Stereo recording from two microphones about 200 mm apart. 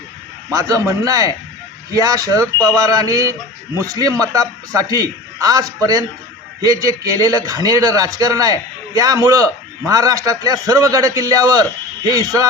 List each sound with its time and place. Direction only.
0.5 s a man's voice: 20° right (ahead or behind)